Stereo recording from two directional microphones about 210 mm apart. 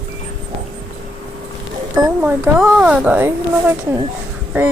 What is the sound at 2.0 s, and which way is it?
Speech, 10° right (ahead or behind).